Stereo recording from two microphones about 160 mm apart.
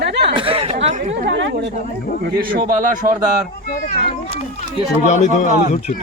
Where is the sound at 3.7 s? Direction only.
65° left (ahead or behind).